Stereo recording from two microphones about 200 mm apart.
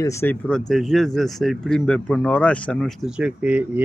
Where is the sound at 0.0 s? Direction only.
15° left (ahead or behind).